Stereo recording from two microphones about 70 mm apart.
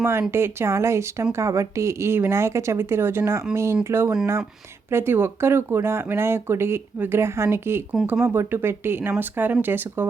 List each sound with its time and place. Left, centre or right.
0.0 s speech: right